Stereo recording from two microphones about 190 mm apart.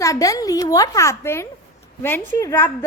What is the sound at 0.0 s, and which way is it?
A woman's voice, 15° left (ahead or behind).